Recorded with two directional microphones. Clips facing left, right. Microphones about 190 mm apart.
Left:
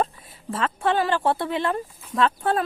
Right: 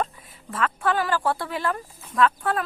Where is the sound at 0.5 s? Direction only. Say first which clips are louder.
Left 1 dB; 25° left (ahead or behind).